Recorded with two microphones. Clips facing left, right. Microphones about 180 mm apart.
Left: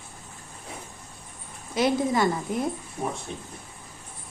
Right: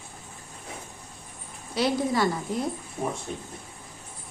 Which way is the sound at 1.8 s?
20° left (ahead or behind).